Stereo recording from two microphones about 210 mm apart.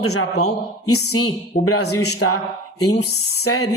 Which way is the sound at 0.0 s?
90° left.